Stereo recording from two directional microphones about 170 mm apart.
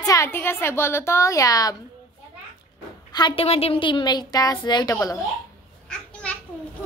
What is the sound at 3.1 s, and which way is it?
A woman's voice, 30° left (ahead or behind).